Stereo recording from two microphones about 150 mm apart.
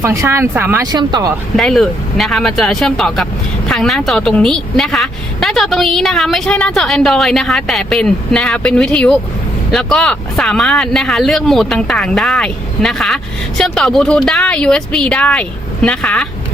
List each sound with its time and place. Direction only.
0.0 s speech: 20° right (ahead or behind)
0.9 s speech: 25° right (ahead or behind)
1.5 s a woman's voice: centre (ahead or behind)